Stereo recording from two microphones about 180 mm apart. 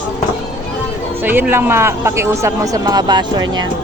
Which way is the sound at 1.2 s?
10° right (ahead or behind).